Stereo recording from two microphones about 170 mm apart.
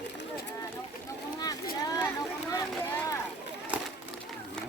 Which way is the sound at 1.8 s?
20° left (ahead or behind).